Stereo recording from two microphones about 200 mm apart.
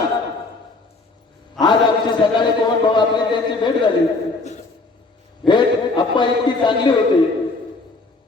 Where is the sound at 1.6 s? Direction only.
25° left (ahead or behind).